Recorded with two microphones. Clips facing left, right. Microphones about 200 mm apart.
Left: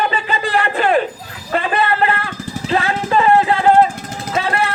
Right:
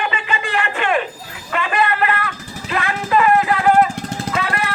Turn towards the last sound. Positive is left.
turn(degrees=30)  # may be behind; listen again after turning